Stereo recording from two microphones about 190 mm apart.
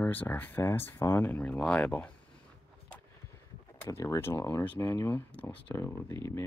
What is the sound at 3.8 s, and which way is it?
Speech, 15° left (ahead or behind).